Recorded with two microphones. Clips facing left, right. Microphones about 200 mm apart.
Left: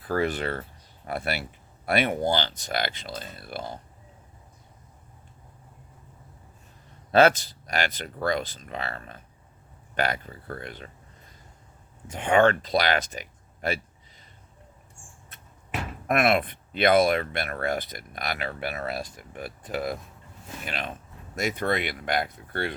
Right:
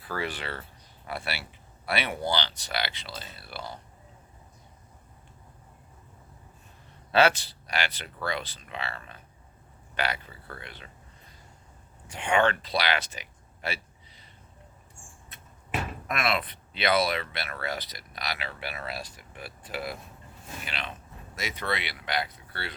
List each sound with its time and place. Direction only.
0.0 s speech: 45° left (ahead or behind)
7.1 s speech: 45° left (ahead or behind)
12.1 s speech: 45° left (ahead or behind)
16.0 s speech: 50° left (ahead or behind)